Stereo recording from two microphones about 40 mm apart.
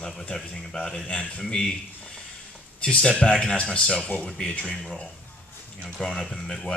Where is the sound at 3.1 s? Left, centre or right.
Left.